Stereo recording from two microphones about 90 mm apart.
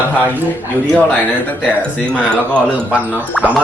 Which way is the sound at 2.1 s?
15° left (ahead or behind).